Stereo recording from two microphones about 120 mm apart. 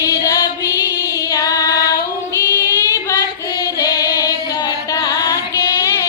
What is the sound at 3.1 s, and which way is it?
Female singing, 30° left (ahead or behind).